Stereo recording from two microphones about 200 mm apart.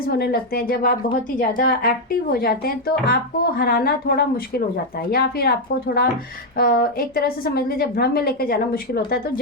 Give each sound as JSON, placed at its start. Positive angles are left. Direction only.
{"t": 0.1, "sound": "a woman's voice", "side_deg": 50}